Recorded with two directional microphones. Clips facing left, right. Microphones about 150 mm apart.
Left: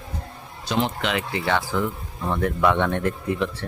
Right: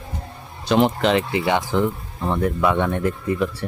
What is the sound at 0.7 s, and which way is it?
Speech, 55° right (ahead or behind).